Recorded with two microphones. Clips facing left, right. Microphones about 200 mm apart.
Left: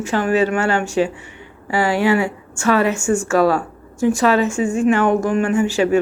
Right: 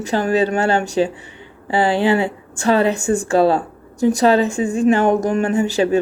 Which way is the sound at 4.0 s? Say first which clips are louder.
Right 1 dB; 35° right (ahead or behind).